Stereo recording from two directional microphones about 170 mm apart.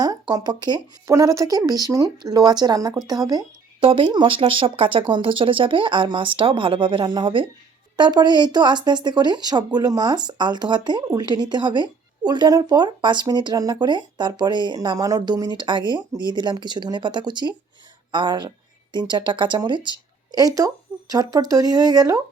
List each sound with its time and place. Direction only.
0.0 s speech: 25° right (ahead or behind)